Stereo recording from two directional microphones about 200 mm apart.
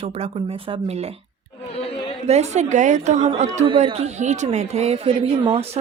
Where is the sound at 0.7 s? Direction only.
30° right (ahead or behind).